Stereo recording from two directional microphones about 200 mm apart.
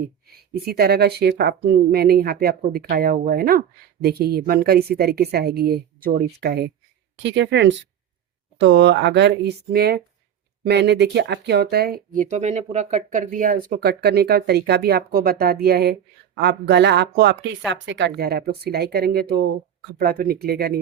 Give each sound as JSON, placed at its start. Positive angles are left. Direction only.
{"t": 0.3, "sound": "speech", "side_deg": -50}